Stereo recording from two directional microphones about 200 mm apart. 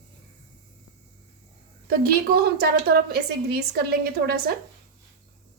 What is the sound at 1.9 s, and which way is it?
A woman's voice, 50° right (ahead or behind).